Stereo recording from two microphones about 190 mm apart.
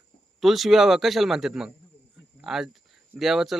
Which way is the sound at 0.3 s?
Centre (ahead or behind).